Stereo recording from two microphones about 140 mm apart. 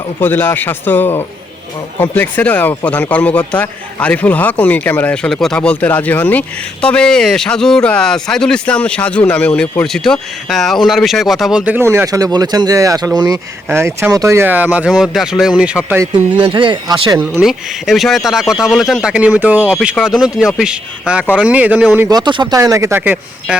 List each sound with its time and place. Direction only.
0.2 s speech: 15° left (ahead or behind); by 13.4 s 30° right (ahead or behind)
13.7 s speech: 15° right (ahead or behind)
16.4 s speech: 35° right (ahead or behind)
17.3 s speech: centre (ahead or behind)
22.1 s speech: 35° right (ahead or behind); by 23.6 s 10° right (ahead or behind)